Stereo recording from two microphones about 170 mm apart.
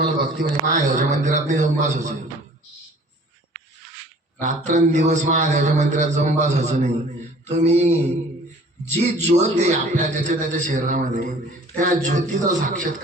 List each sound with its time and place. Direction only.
0.2 s a man's voice: 45° right (ahead or behind)
4.4 s a man's voice: 45° right (ahead or behind)
7.4 s mantra: 40° right (ahead or behind)
9.2 s a man's voice: 40° right (ahead or behind)